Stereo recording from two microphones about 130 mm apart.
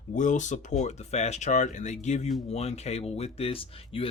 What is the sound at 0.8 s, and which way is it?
Speech, 60° left (ahead or behind).